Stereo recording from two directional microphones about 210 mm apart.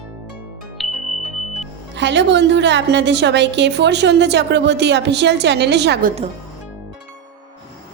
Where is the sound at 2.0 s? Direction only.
55° right (ahead or behind).